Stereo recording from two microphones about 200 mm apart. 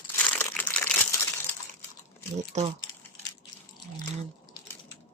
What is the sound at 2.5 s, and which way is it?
Speech, 35° right (ahead or behind).